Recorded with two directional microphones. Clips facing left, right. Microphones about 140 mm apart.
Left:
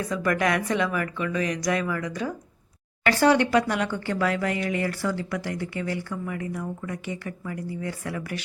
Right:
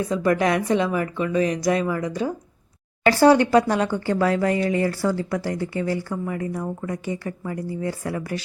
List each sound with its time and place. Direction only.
0.0 s speech: 25° right (ahead or behind)